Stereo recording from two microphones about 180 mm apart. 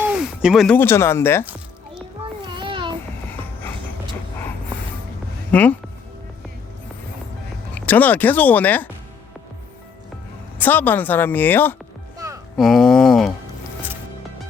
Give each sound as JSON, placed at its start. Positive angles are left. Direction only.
{"t": 0.0, "sound": "a sound", "side_deg": -5}
{"t": 0.8, "sound": "speech", "side_deg": 15}
{"t": 2.6, "sound": "babbling", "side_deg": -25}
{"t": 5.5, "sound": "speech", "side_deg": 10}
{"t": 7.8, "sound": "speech", "side_deg": 10}
{"t": 10.6, "sound": "speech", "side_deg": 10}
{"t": 12.5, "sound": "a sound", "side_deg": 0}